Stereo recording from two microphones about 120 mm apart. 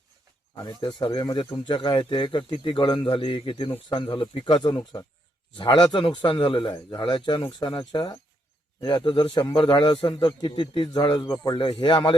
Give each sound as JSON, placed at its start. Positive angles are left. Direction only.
{"t": 0.5, "sound": "a man's voice", "side_deg": 40}